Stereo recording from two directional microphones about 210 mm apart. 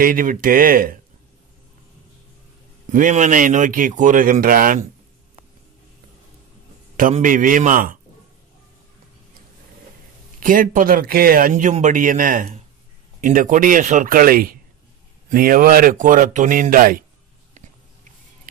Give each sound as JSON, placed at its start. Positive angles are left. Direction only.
{"t": 0.0, "sound": "speech", "side_deg": -40}
{"t": 2.9, "sound": "speech", "side_deg": -40}
{"t": 7.0, "sound": "speech", "side_deg": -40}
{"t": 10.4, "sound": "speech", "side_deg": -40}